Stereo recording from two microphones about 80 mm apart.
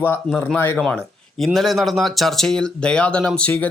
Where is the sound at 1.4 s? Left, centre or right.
Centre.